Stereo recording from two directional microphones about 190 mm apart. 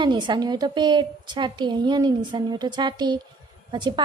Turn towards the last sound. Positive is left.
turn(degrees=-25)  # may be behind; listen again after turning